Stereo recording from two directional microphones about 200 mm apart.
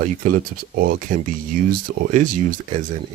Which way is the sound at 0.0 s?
40° right (ahead or behind).